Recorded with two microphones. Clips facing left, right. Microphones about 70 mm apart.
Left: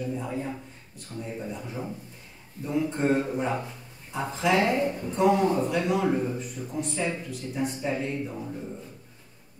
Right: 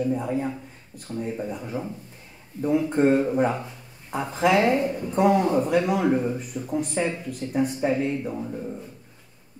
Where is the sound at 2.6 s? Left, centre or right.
Right.